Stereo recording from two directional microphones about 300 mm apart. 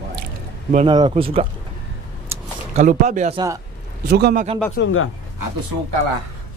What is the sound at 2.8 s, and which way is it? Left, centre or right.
A man's voice, right.